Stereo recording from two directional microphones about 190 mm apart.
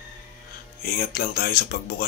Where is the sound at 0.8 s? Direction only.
50° left (ahead or behind).